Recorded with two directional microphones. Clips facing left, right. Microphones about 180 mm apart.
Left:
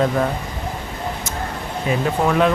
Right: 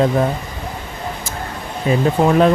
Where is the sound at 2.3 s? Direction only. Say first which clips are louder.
Right 4 dB; 35° right (ahead or behind).